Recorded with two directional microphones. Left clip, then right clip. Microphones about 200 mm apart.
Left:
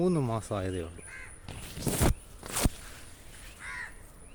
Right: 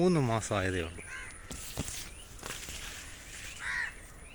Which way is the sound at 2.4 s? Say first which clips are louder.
Left 3 dB; 5° right (ahead or behind).